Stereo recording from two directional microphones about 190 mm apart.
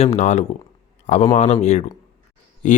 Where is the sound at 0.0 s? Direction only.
35° left (ahead or behind).